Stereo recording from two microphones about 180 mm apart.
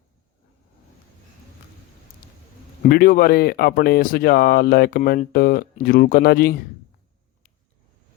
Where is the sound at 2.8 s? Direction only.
55° left (ahead or behind).